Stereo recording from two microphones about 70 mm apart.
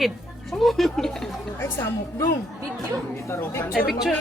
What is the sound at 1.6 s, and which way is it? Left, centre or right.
Speech, left.